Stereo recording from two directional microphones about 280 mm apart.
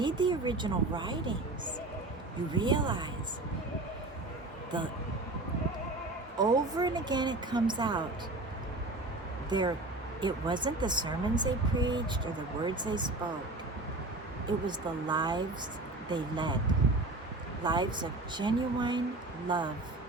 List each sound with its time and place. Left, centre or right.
0.0 s speech: centre
2.5 s speech: centre
6.4 s speech: centre
9.5 s speech: centre
14.4 s speech: centre
17.6 s speech: centre